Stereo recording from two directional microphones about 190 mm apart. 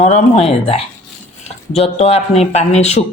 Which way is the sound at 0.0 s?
35° left (ahead or behind).